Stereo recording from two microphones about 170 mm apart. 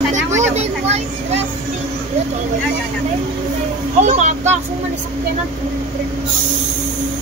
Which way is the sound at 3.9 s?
45° right (ahead or behind).